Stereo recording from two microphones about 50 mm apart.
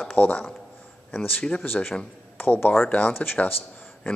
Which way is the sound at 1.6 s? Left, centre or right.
Left.